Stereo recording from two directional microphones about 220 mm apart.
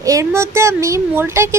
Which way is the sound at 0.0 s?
15° right (ahead or behind).